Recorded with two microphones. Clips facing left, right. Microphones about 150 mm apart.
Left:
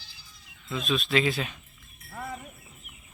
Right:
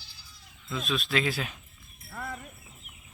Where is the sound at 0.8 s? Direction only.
Centre (ahead or behind).